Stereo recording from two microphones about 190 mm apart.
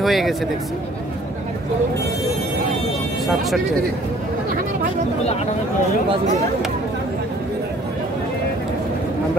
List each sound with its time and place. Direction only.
0.0 s speech: centre (ahead or behind)
3.3 s speech: centre (ahead or behind)